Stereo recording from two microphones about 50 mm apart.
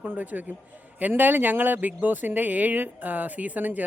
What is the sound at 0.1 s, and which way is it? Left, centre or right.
Speech, right.